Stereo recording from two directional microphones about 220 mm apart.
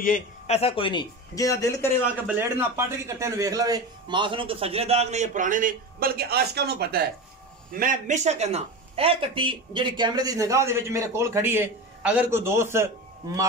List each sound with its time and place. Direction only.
0.0 s a man's voice: 35° left (ahead or behind); by 1.9 s 15° left (ahead or behind)
2.2 s a man's voice: 10° right (ahead or behind)